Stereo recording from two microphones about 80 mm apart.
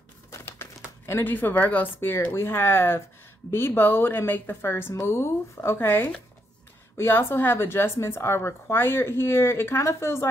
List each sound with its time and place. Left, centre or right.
0.3 s crumpling: left
1.0 s a woman's voice: left